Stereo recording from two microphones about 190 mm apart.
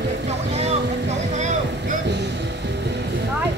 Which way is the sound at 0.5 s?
35° right (ahead or behind).